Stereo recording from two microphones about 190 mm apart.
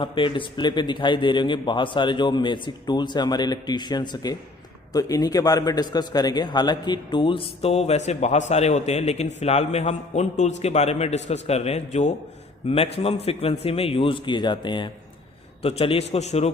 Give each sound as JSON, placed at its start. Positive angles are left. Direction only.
{"t": 0.0, "sound": "a man's voice", "side_deg": 25}